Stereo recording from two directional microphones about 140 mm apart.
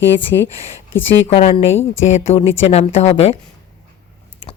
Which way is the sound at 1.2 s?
45° left (ahead or behind).